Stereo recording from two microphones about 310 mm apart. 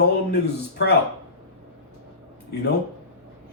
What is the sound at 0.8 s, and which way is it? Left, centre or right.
Speech, left.